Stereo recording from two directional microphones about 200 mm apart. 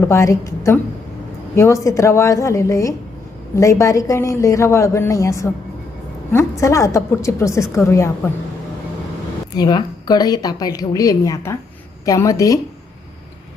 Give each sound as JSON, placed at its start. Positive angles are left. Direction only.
{"t": 0.0, "sound": "a woman's voice", "side_deg": 15}
{"t": 9.6, "sound": "a woman's voice", "side_deg": 20}